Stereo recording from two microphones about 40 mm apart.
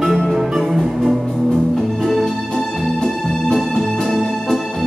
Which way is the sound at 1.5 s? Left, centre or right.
Centre.